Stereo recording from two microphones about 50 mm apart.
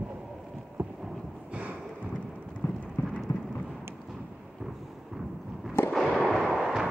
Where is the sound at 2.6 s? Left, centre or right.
Left.